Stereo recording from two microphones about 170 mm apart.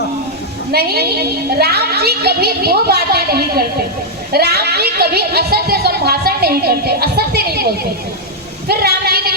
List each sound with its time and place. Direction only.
0.7 s a woman's voice: 65° right (ahead or behind)